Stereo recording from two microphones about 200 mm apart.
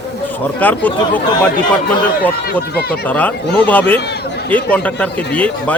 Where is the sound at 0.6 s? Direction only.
10° left (ahead or behind).